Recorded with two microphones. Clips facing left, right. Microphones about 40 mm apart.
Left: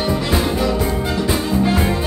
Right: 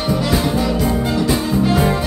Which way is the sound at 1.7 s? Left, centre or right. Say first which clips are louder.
Right 4 dB; centre.